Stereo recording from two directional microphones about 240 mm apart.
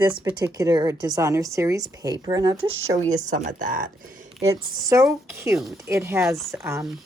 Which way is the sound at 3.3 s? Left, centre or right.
Right.